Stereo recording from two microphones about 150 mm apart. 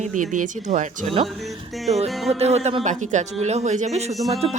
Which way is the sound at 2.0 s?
Centre (ahead or behind).